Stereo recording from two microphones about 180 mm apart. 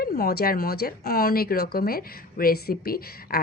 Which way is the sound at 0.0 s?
60° left (ahead or behind).